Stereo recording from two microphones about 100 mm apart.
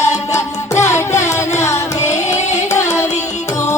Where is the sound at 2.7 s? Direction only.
30° left (ahead or behind).